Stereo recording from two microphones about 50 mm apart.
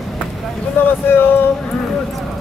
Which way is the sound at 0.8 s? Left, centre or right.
Left.